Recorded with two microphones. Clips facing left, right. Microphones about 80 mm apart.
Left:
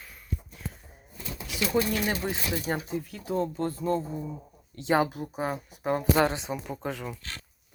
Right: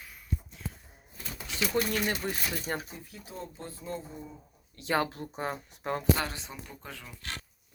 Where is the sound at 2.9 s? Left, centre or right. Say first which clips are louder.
Left 14 dB; left.